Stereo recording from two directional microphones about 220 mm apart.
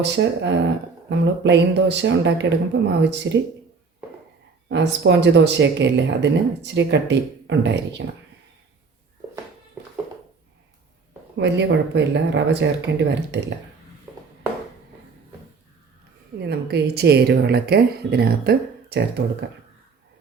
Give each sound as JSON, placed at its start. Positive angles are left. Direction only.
{"t": 0.0, "sound": "speech", "side_deg": -50}
{"t": 4.7, "sound": "speech", "side_deg": -50}
{"t": 11.3, "sound": "speech", "side_deg": -50}
{"t": 16.4, "sound": "speech", "side_deg": -45}